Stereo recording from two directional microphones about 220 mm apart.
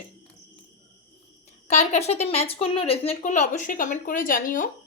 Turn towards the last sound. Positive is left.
turn(degrees=40)  # may be behind; listen again after turning